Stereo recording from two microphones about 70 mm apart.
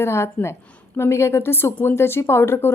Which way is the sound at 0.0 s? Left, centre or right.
Left.